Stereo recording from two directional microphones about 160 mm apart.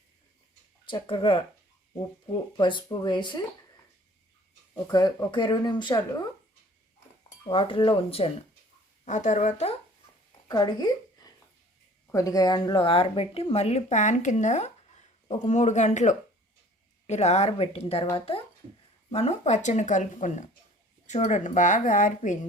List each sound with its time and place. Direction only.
0.9 s speech: 30° left (ahead or behind)
4.9 s speech: 25° left (ahead or behind)
7.4 s speech: 30° left (ahead or behind)
9.0 s speech: 50° left (ahead or behind)
10.5 s speech: 25° left (ahead or behind); by 22.4 s 50° left (ahead or behind)